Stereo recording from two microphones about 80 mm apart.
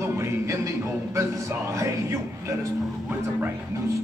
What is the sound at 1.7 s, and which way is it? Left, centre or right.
Music, right.